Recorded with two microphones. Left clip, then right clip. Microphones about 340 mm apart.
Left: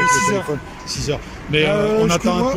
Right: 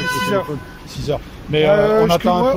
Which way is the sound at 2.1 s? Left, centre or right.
Centre.